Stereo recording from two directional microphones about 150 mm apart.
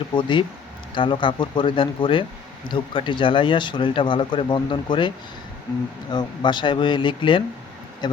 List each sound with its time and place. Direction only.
0.2 s speech: 30° left (ahead or behind)